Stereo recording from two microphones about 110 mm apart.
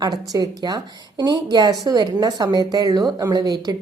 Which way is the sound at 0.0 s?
35° right (ahead or behind).